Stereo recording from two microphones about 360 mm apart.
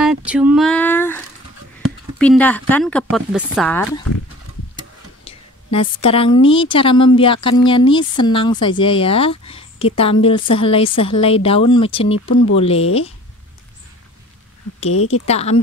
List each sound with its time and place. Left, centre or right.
0.0 s speech: centre
5.2 s a woman's voice: centre
15.0 s a woman's voice: left
15.2 s speech: centre